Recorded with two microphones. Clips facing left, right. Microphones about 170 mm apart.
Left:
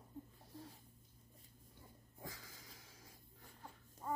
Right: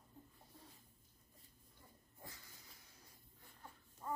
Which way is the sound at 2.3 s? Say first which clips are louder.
Left 6 dB; 90° left.